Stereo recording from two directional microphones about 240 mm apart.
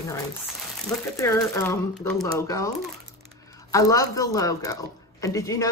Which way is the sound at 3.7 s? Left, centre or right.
Centre.